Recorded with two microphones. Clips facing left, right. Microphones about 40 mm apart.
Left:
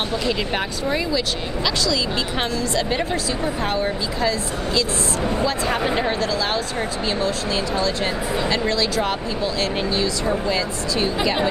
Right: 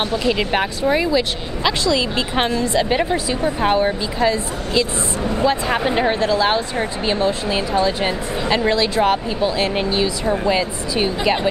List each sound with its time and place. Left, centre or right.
0.3 s speech: centre